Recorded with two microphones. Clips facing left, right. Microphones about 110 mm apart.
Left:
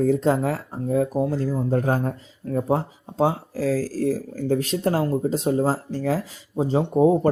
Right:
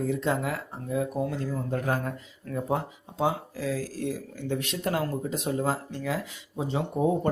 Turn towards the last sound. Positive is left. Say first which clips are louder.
# left 8 dB
turn(degrees=35)  # may be behind; listen again after turning